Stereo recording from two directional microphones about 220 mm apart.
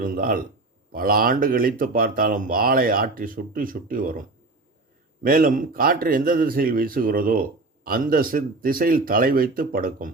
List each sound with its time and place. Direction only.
0.0 s a man's voice: 40° right (ahead or behind)